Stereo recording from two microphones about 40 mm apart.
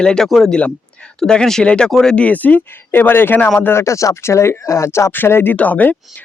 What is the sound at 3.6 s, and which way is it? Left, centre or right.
Speech, left.